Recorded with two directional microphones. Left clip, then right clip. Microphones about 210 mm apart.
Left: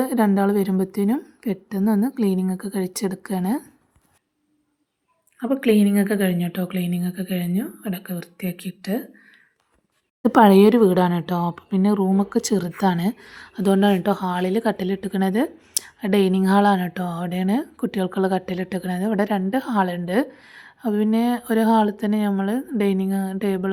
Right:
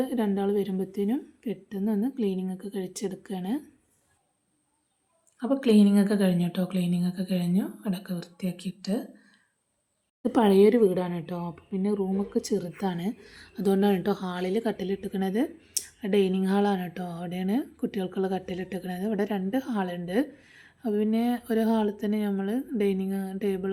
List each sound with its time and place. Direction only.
0.0 s speech: 20° left (ahead or behind)
5.4 s speech: 10° left (ahead or behind)